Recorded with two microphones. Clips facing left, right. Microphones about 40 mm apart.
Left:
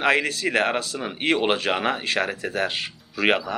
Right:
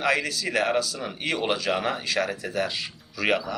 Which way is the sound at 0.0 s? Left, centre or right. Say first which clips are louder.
Left 4 dB; left.